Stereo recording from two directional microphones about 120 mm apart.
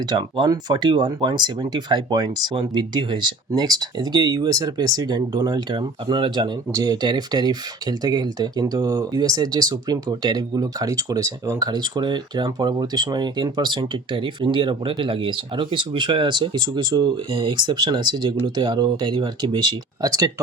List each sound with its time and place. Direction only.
0.0 s speech: 40° right (ahead or behind)